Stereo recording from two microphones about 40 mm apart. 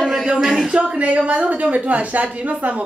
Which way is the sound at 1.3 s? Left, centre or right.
Right.